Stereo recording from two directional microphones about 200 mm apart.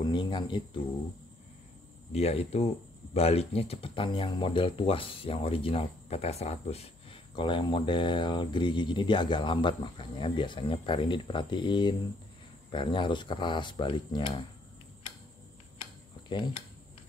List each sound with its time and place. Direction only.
0.0 s speech: 20° left (ahead or behind)
2.1 s speech: 30° left (ahead or behind)
16.3 s speech: 25° left (ahead or behind)